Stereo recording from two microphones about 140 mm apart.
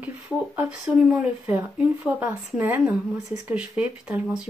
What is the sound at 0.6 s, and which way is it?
Speech, 5° right (ahead or behind).